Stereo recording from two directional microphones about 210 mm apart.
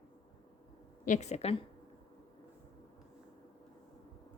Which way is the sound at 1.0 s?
35° left (ahead or behind).